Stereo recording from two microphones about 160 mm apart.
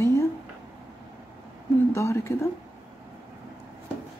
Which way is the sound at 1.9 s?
20° left (ahead or behind).